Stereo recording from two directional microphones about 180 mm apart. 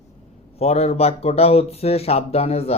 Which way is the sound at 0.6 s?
35° left (ahead or behind).